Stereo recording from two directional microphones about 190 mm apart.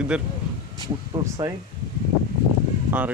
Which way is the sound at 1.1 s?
15° right (ahead or behind).